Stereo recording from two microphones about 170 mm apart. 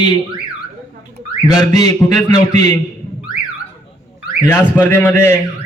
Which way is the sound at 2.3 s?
45° right (ahead or behind).